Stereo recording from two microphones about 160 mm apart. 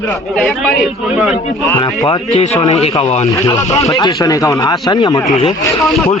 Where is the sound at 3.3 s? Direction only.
20° left (ahead or behind).